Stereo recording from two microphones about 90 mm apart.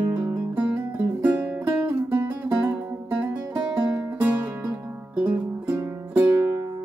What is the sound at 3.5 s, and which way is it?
Music, 55° right (ahead or behind).